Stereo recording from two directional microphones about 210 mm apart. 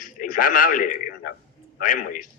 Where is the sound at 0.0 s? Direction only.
40° left (ahead or behind).